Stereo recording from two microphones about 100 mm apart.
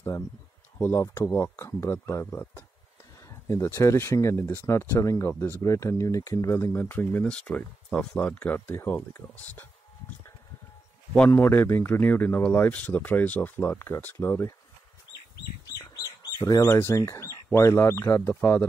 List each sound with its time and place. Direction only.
0.7 s speech: 30° left (ahead or behind)
11.2 s speech: 20° left (ahead or behind)
15.9 s bird: 45° left (ahead or behind)
16.6 s speech: 25° left (ahead or behind)